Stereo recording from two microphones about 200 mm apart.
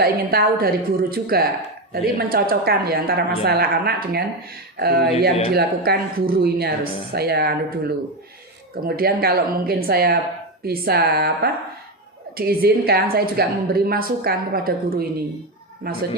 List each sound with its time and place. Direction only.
0.0 s speech: 50° right (ahead or behind)
8.7 s speech: 50° right (ahead or behind)